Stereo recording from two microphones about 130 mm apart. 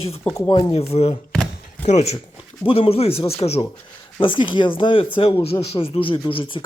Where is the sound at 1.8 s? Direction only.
60° left (ahead or behind).